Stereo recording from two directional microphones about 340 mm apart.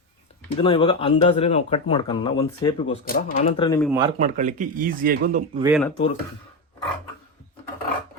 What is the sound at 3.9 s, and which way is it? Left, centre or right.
Speech, centre.